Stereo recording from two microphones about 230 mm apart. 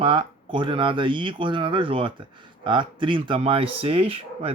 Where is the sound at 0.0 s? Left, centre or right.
Right.